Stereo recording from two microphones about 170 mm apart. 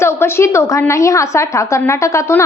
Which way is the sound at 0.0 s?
15° left (ahead or behind).